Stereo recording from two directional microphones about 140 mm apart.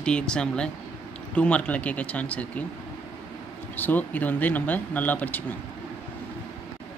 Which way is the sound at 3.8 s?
10° left (ahead or behind).